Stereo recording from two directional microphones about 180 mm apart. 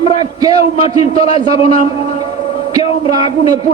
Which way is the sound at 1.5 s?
35° left (ahead or behind).